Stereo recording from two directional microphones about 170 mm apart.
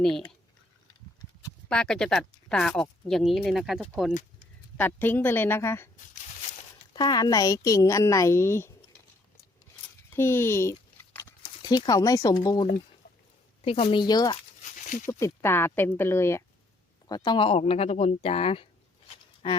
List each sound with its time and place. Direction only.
1.7 s speech: 5° left (ahead or behind)
4.8 s speech: 10° left (ahead or behind)
6.9 s a woman's voice: 25° left (ahead or behind)
10.2 s a sound: 15° left (ahead or behind)
11.4 s speech: 25° left (ahead or behind)
13.9 s a woman's voice: 25° left (ahead or behind)
15.0 s speech: 15° left (ahead or behind)
17.1 s speech: 25° left (ahead or behind)